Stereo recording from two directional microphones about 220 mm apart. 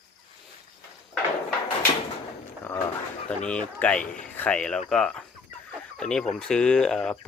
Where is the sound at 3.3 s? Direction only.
5° left (ahead or behind).